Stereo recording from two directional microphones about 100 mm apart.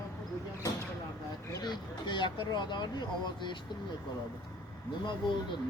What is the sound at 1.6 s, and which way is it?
Speech, 50° left (ahead or behind).